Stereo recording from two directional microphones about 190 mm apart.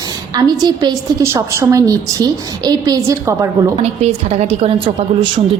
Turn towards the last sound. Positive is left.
turn(degrees=-25)  # may be behind; listen again after turning